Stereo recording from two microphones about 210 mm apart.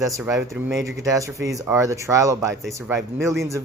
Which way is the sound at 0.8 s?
15° right (ahead or behind).